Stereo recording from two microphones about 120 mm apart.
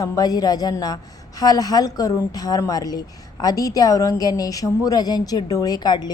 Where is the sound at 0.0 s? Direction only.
30° left (ahead or behind).